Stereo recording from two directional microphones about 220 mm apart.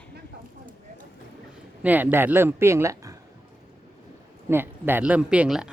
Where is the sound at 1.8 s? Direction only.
5° right (ahead or behind).